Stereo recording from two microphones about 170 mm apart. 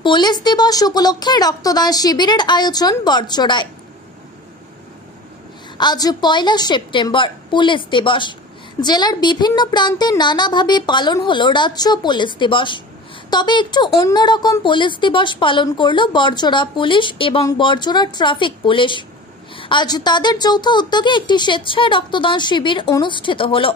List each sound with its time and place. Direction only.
0.0 s a woman's voice: 25° left (ahead or behind)
5.8 s a woman's voice: 25° left (ahead or behind)